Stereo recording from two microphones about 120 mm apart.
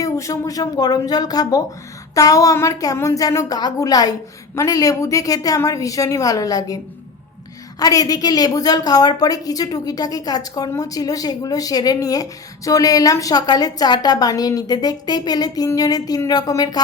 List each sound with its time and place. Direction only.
0.0 s a woman's voice: 25° left (ahead or behind)
7.8 s a woman's voice: 30° left (ahead or behind)